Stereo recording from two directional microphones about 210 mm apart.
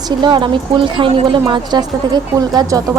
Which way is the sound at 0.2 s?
20° right (ahead or behind).